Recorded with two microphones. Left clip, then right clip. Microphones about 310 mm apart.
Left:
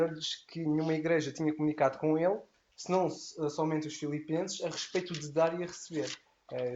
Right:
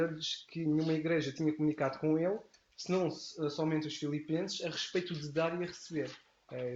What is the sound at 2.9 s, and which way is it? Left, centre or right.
Speech, left.